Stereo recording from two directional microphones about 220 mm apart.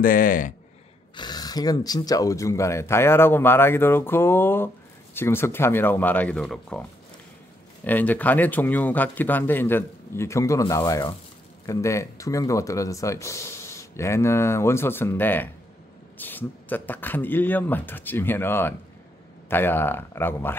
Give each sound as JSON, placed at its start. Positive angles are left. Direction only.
{"t": 0.0, "sound": "speech", "side_deg": 40}
{"t": 1.1, "sound": "speech", "side_deg": 20}
{"t": 7.8, "sound": "speech", "side_deg": 10}